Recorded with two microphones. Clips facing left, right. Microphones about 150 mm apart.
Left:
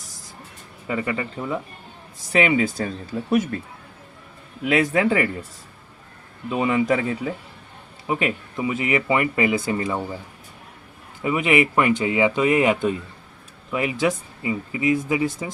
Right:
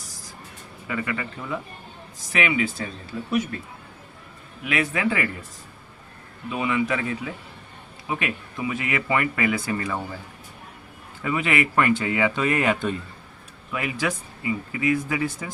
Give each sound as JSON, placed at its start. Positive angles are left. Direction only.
{"t": 0.9, "sound": "speech", "side_deg": 30}
{"t": 4.6, "sound": "speech", "side_deg": 35}
{"t": 6.5, "sound": "speech", "side_deg": 35}
{"t": 8.0, "sound": "speech", "side_deg": 25}
{"t": 11.2, "sound": "speech", "side_deg": 20}